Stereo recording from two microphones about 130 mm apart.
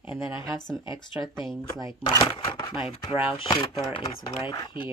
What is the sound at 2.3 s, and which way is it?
Speech, 40° left (ahead or behind).